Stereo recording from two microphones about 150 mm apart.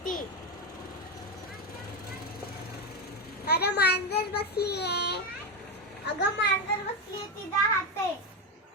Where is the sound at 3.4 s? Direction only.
90° left.